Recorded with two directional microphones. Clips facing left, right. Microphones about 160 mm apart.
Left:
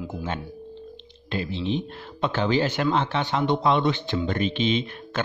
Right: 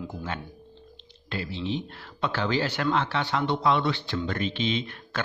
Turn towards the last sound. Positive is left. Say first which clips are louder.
# left 4 dB
turn(degrees=20)  # may be behind; listen again after turning